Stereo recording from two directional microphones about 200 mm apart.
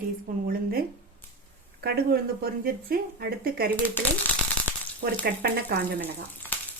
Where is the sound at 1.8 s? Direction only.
50° right (ahead or behind).